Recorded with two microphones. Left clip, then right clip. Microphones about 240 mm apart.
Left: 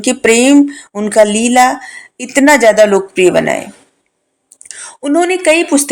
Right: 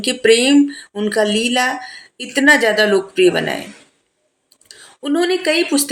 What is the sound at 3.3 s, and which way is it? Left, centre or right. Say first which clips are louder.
Speech: left 8 dB; left.